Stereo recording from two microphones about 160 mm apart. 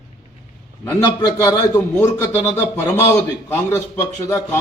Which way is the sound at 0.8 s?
15° left (ahead or behind).